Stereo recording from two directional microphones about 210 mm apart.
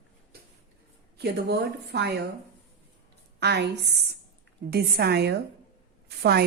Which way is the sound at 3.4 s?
50° right (ahead or behind).